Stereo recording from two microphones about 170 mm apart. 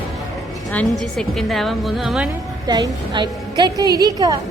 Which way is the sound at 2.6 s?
20° right (ahead or behind).